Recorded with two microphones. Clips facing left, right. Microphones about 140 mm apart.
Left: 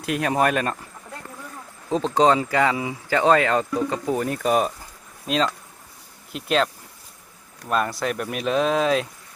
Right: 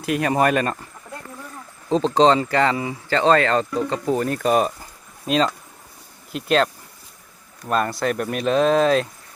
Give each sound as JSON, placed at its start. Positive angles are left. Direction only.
{"t": 0.0, "sound": "speech", "side_deg": 0}
{"t": 1.9, "sound": "speech", "side_deg": 5}
{"t": 7.7, "sound": "speech", "side_deg": 5}